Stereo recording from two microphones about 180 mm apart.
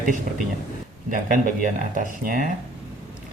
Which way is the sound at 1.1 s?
50° right (ahead or behind).